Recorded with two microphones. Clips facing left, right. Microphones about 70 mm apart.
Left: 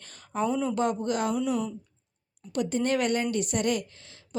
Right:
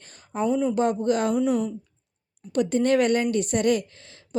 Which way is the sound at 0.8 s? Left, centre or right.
Right.